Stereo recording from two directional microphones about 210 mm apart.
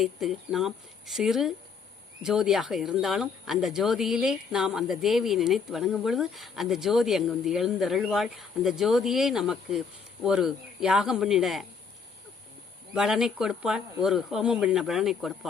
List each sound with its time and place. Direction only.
0.0 s speech: centre (ahead or behind)
12.9 s speech: centre (ahead or behind)